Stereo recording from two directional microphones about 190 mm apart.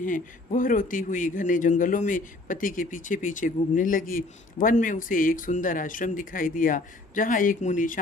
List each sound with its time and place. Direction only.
0.0 s a man's voice: 45° left (ahead or behind)